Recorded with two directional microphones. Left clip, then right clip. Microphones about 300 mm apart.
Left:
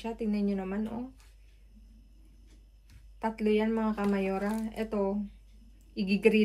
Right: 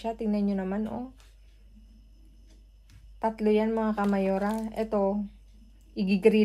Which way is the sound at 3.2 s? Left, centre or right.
Right.